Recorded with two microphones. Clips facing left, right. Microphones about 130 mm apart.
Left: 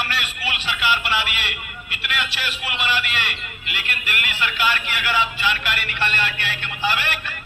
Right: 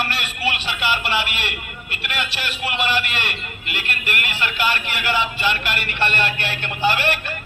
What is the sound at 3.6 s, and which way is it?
Speech, 50° right (ahead or behind).